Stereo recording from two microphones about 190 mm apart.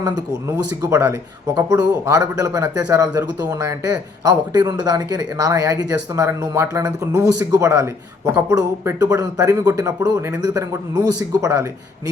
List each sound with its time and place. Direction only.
0.0 s speech: 20° right (ahead or behind)